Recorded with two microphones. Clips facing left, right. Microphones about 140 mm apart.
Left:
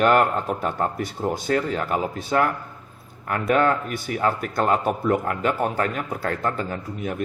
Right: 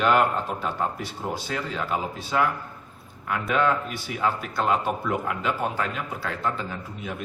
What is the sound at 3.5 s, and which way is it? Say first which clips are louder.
Speech: left 4 dB; 50° left (ahead or behind).